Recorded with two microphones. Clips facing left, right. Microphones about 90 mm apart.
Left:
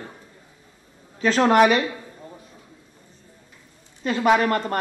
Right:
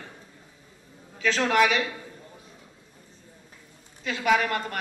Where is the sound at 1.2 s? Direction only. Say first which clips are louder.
Left 6 dB; 45° left (ahead or behind).